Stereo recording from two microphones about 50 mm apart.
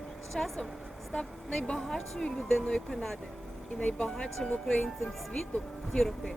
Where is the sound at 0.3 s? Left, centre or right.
Centre.